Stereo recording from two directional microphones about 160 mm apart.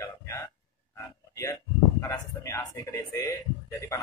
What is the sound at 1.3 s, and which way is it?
Speech, 20° left (ahead or behind).